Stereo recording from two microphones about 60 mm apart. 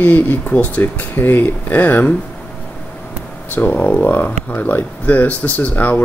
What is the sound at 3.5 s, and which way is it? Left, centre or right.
Speech, left.